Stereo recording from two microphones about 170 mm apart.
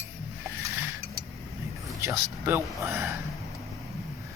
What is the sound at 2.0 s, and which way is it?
Speech, 15° right (ahead or behind).